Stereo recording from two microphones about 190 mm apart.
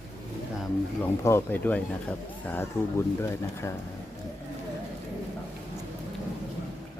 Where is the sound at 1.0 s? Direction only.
15° left (ahead or behind).